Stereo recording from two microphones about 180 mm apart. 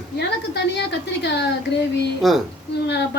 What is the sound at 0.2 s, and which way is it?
A woman's voice, 70° left (ahead or behind).